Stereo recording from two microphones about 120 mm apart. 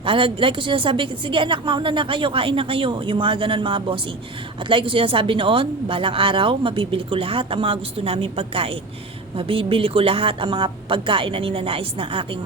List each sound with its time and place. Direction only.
0.0 s speech: 45° right (ahead or behind)